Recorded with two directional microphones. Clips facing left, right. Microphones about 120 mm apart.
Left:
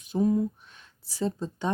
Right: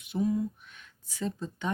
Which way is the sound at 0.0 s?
40° left (ahead or behind).